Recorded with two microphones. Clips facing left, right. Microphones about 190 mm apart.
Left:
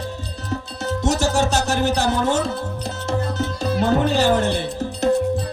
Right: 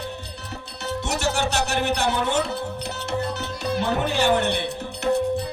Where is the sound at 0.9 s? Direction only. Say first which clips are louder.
Left 5 dB; 60° right (ahead or behind).